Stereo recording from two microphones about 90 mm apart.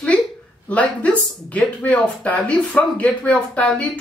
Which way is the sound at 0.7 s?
15° left (ahead or behind).